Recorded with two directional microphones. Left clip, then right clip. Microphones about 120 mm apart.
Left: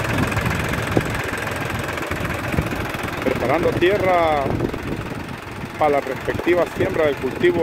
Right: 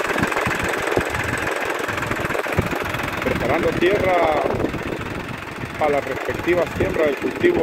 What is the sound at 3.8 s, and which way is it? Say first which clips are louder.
Speech: even; 15° left (ahead or behind).